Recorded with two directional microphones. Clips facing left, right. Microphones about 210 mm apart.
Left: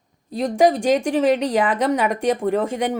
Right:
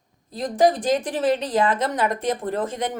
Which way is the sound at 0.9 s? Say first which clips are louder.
Left 4 dB; 15° left (ahead or behind).